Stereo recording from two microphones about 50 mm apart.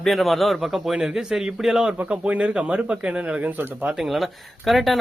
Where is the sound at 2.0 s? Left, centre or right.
Right.